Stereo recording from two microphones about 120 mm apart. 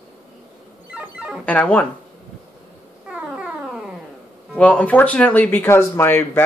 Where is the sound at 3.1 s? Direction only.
5° right (ahead or behind).